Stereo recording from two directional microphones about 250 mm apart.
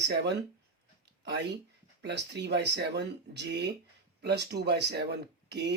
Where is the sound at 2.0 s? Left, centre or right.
Right.